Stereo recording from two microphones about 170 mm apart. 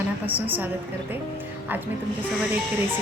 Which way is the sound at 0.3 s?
10° right (ahead or behind).